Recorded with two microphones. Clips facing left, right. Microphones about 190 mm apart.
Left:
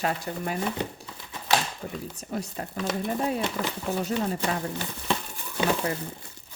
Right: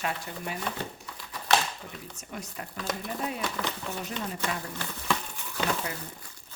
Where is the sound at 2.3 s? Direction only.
35° left (ahead or behind).